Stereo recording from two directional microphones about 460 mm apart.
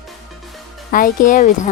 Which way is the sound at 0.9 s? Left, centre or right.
Centre.